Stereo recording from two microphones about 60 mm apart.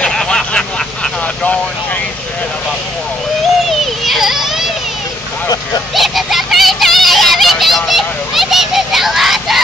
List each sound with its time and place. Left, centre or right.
0.0 s vehicle: centre
3.8 s a sound: centre
5.9 s honk: centre